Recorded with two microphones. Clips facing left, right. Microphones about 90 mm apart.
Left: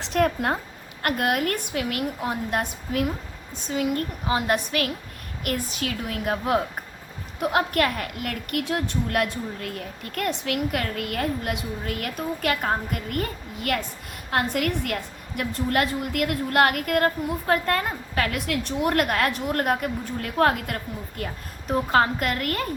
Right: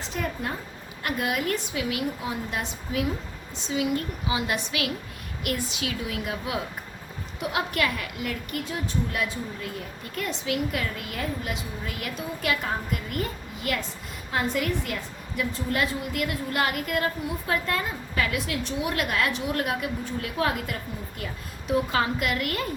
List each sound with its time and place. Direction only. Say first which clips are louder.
0.0 s a woman's voice: left 8 dB; 65° left (ahead or behind); by 22.6 s 45° left (ahead or behind)